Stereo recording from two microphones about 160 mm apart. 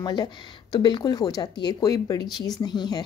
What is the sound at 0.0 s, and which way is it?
Speech, 25° left (ahead or behind).